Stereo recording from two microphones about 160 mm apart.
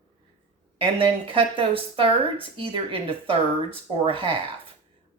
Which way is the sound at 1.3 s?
35° right (ahead or behind).